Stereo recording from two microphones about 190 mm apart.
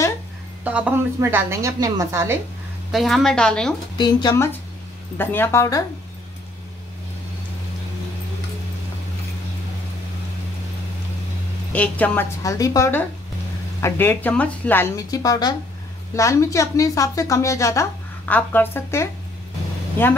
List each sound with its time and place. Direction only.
0.7 s a woman's voice: 5° right (ahead or behind)
2.9 s a woman's voice: centre (ahead or behind)
4.0 s a woman's voice: 20° left (ahead or behind)
11.7 s a woman's voice: 10° left (ahead or behind)